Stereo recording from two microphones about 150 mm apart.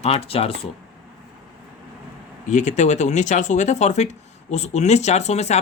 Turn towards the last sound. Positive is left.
turn(degrees=45)  # may be behind; listen again after turning